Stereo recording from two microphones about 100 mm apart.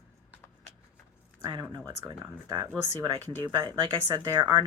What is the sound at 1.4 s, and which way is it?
Speech, 45° right (ahead or behind).